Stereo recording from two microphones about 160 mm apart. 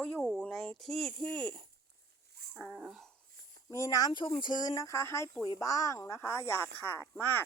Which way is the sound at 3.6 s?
20° left (ahead or behind).